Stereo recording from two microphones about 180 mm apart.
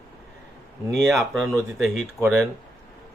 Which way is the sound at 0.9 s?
Centre (ahead or behind).